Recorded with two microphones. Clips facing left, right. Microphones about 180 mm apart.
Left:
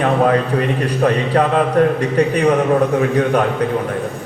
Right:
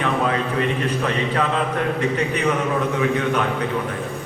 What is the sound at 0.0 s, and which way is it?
A man's voice, 45° left (ahead or behind).